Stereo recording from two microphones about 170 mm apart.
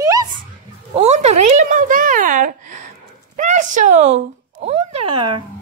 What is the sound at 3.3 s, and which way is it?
Speech, 45° right (ahead or behind).